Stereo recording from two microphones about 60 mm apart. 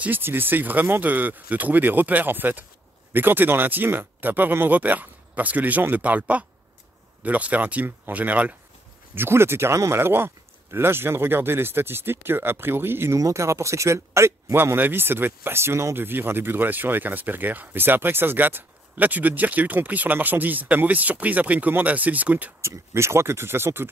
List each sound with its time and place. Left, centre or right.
0.0 s a man's voice: right
9.1 s a man's voice: right
13.1 s a man's voice: right
22.6 s speech: right